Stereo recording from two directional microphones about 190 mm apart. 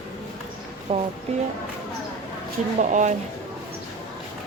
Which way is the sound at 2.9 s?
40° right (ahead or behind).